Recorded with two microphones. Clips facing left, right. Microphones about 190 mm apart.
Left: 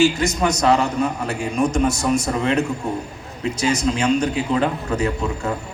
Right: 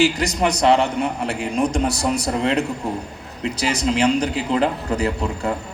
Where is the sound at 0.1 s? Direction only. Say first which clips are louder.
Even; 35° right (ahead or behind).